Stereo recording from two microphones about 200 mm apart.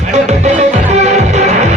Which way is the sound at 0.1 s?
35° right (ahead or behind).